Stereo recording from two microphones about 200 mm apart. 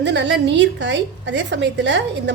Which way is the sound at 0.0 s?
60° right (ahead or behind).